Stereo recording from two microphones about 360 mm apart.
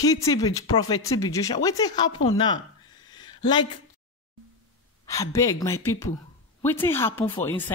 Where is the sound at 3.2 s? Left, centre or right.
Centre.